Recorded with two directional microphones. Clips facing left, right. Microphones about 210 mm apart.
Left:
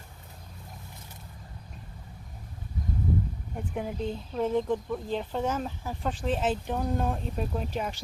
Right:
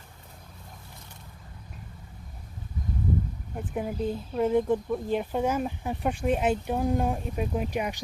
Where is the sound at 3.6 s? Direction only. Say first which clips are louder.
Right 2 dB; 5° right (ahead or behind).